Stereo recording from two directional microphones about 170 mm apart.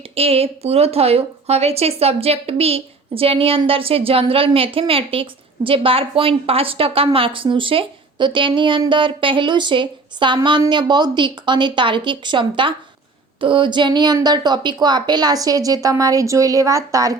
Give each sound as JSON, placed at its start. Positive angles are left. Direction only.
{"t": 0.1, "sound": "a woman's voice", "side_deg": -35}